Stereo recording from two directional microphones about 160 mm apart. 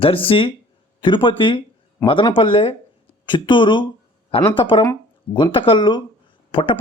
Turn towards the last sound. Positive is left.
turn(degrees=35)  # may be behind; listen again after turning